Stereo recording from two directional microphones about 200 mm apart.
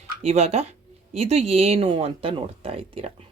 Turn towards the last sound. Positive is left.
turn(degrees=-30)  # may be behind; listen again after turning